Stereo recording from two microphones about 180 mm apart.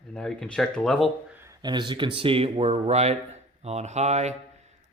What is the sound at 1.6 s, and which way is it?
Speech, 25° right (ahead or behind).